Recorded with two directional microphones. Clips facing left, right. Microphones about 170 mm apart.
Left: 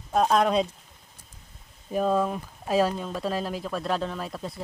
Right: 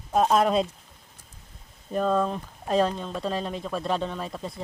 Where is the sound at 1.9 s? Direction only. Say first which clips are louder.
Even; 10° left (ahead or behind).